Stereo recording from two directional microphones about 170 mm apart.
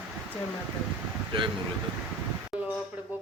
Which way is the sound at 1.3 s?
30° right (ahead or behind).